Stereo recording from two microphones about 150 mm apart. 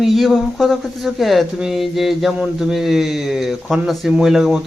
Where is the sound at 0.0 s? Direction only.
Centre (ahead or behind).